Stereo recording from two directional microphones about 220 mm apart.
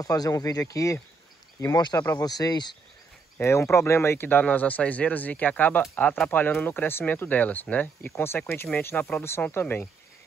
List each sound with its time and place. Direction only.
0.0 s speech: 15° left (ahead or behind)